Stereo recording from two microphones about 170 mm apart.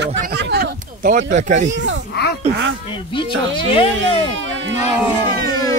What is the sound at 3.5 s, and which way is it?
Speech, 30° left (ahead or behind).